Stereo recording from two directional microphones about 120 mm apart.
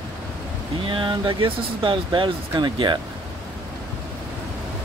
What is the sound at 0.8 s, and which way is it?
Speech, 45° right (ahead or behind).